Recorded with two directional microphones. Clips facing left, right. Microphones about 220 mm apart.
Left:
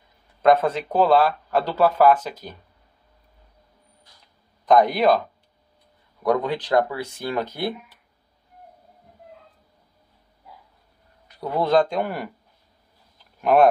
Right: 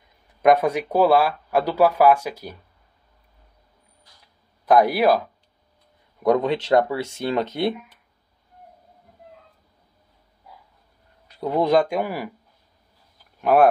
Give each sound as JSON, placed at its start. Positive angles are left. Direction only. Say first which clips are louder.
{"t": 0.4, "sound": "speech", "louder": "right 1 dB", "side_deg": -15}
{"t": 4.6, "sound": "speech", "louder": "even", "side_deg": -10}
{"t": 6.2, "sound": "speech", "louder": "right 3 dB", "side_deg": -20}
{"t": 11.3, "sound": "speech", "louder": "right 1 dB", "side_deg": -20}
{"t": 13.4, "sound": "speech", "louder": "even", "side_deg": -5}